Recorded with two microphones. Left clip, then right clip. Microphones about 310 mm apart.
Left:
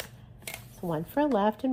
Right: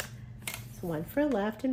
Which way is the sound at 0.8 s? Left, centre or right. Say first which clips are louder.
Left 3 dB; left.